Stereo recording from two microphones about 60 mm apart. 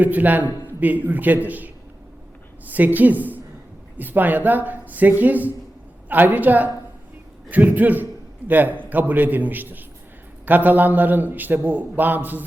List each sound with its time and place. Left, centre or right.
0.0 s speech: right
2.7 s a man's voice: right